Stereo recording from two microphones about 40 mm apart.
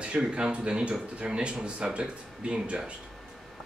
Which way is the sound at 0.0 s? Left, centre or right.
Right.